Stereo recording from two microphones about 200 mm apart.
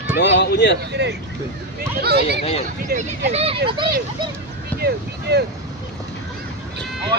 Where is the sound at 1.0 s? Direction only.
55° right (ahead or behind).